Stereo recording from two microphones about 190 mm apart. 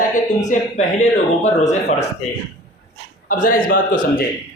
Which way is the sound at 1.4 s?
35° left (ahead or behind).